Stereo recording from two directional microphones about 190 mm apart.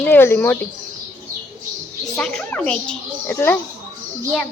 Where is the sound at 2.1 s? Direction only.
5° left (ahead or behind).